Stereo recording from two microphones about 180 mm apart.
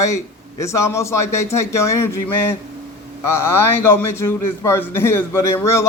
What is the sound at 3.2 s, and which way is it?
A man's voice, 15° left (ahead or behind).